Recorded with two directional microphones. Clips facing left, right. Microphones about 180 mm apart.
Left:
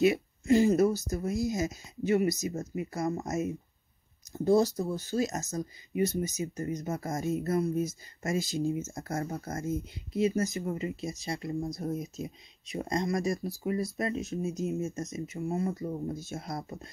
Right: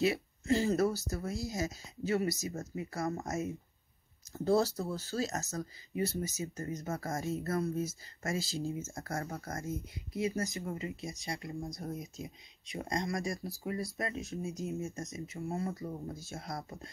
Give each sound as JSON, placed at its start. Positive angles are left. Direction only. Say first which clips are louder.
{"t": 0.0, "sound": "speech", "louder": "left 6 dB", "side_deg": 20}